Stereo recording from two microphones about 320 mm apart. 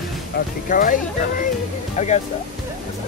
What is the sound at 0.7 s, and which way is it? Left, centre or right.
Speech, left.